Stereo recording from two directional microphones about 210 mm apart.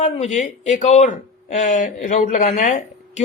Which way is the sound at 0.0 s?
35° left (ahead or behind).